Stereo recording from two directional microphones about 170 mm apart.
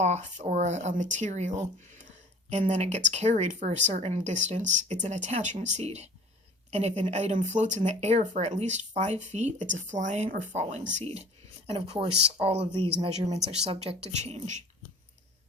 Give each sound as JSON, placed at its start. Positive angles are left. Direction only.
{"t": 0.0, "sound": "speech", "side_deg": -45}